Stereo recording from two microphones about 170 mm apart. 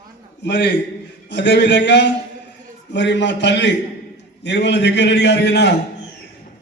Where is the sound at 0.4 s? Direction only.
90° left.